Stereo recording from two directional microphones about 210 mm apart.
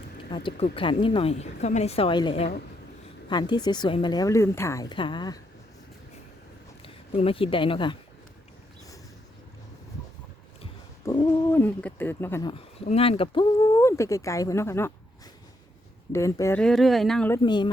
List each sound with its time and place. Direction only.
0.3 s a woman's voice: 25° left (ahead or behind)
6.8 s speech: 25° left (ahead or behind)
11.0 s a sound: 20° left (ahead or behind)
11.5 s speech: 10° left (ahead or behind)
12.5 s speech: 30° left (ahead or behind); by 14.9 s 10° left (ahead or behind)
16.1 s speech: 15° left (ahead or behind)
17.4 s a woman's voice: 20° left (ahead or behind)